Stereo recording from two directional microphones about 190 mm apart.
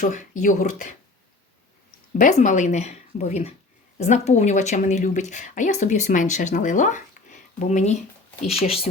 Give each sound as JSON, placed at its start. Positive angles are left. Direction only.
{"t": 0.0, "sound": "speech", "side_deg": 40}
{"t": 2.1, "sound": "speech", "side_deg": 40}